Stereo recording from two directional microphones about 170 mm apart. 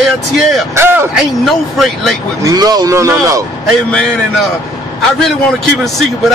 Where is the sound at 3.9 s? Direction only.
5° left (ahead or behind).